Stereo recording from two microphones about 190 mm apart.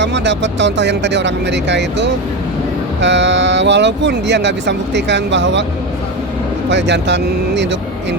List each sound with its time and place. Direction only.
0.0 s speech: 70° right (ahead or behind)
6.7 s speech: 65° right (ahead or behind)